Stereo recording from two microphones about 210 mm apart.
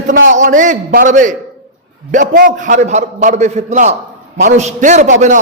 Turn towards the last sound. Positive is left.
turn(degrees=-35)  # may be behind; listen again after turning